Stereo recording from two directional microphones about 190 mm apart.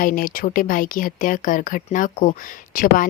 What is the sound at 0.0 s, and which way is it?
Speech, 45° left (ahead or behind).